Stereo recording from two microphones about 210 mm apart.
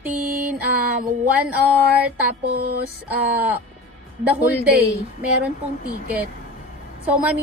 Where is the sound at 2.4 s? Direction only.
50° right (ahead or behind).